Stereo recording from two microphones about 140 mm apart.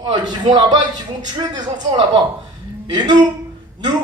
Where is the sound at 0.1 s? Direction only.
30° right (ahead or behind).